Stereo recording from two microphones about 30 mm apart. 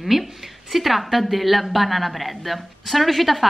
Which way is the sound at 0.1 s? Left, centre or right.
Centre.